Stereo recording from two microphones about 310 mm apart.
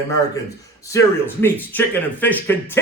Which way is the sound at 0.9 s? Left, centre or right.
Centre.